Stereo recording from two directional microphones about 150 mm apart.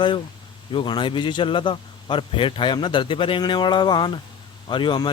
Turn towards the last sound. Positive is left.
turn(degrees=30)  # may be behind; listen again after turning